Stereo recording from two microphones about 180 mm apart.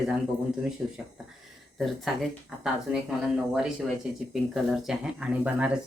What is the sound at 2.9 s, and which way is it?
Speech, 5° right (ahead or behind).